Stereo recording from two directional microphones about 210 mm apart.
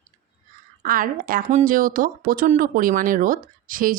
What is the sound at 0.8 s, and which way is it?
Speech, 40° right (ahead or behind).